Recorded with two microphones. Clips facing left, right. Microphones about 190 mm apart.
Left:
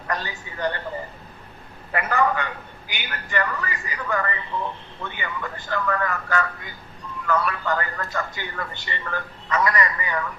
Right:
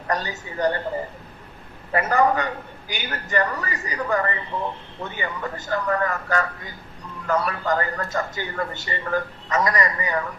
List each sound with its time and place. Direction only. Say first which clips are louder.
0.1 s a man's voice: right 3 dB; 40° right (ahead or behind)
1.9 s a man's voice: right 3 dB; 40° right (ahead or behind)